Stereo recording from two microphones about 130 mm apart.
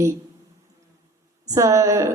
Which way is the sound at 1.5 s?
25° right (ahead or behind).